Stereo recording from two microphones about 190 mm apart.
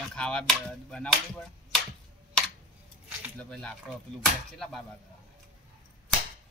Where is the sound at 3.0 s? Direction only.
Centre (ahead or behind).